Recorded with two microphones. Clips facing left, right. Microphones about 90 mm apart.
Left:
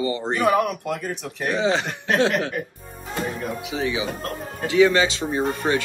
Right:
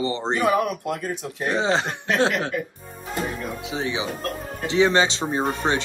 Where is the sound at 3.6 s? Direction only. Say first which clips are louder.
Left 1 dB; 30° right (ahead or behind).